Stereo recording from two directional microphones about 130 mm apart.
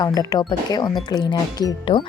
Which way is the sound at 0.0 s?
30° left (ahead or behind).